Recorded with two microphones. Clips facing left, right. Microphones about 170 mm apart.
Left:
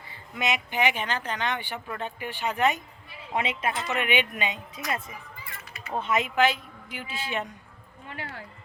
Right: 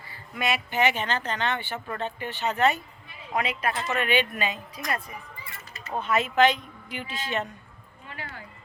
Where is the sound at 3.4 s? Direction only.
25° left (ahead or behind).